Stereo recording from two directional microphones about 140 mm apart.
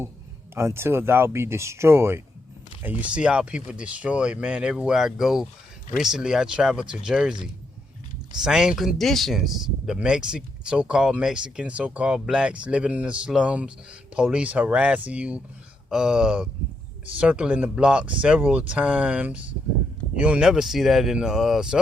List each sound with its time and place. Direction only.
0.5 s speech: 20° right (ahead or behind)